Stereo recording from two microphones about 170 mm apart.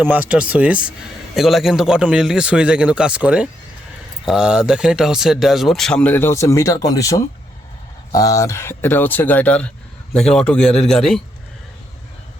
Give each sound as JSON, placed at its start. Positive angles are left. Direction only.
{"t": 0.0, "sound": "speech", "side_deg": -10}